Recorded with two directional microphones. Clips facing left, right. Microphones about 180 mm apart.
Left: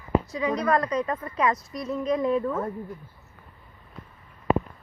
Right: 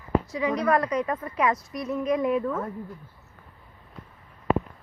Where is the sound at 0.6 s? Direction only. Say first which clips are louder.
Right 1 dB; 15° right (ahead or behind).